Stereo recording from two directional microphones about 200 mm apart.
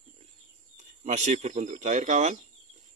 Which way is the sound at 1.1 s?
35° right (ahead or behind).